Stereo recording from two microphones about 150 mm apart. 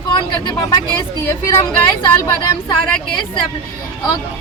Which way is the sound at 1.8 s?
25° left (ahead or behind).